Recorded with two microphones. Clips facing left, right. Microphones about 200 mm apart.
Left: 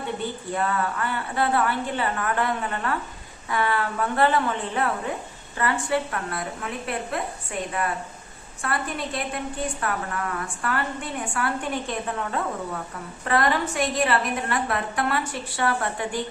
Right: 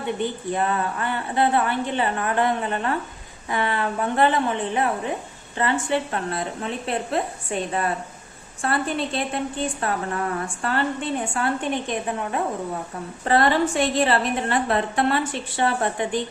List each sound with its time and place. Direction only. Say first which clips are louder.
0.2 s a woman's voice: right 3 dB; 20° right (ahead or behind)
8.6 s a woman's voice: right 4 dB; 30° right (ahead or behind)
13.2 s a woman's voice: right 4 dB; 30° right (ahead or behind)